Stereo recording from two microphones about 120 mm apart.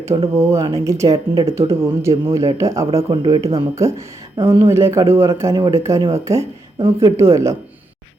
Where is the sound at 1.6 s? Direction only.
55° right (ahead or behind).